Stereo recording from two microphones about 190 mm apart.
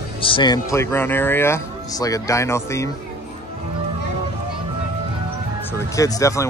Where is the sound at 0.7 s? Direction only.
10° left (ahead or behind).